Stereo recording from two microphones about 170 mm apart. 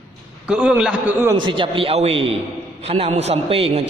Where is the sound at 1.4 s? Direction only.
30° right (ahead or behind).